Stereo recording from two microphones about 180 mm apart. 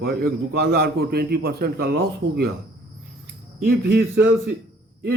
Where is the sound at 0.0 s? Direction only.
60° right (ahead or behind).